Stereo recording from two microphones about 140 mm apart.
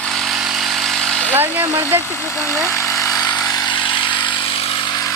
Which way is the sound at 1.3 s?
15° right (ahead or behind).